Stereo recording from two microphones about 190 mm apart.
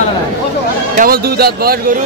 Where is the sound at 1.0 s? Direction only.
55° right (ahead or behind).